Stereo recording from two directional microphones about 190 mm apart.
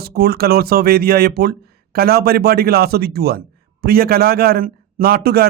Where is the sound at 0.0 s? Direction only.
55° right (ahead or behind).